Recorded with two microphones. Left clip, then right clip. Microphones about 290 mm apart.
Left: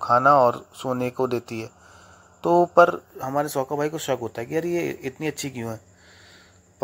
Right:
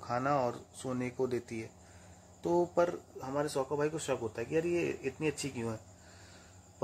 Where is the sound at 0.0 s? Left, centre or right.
Centre.